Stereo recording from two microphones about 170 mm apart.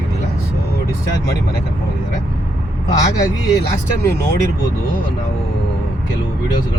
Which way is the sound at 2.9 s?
20° left (ahead or behind).